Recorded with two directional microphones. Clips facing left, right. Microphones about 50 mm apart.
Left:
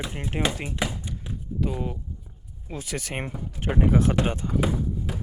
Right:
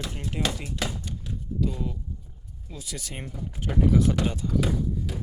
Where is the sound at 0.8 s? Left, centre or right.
Left.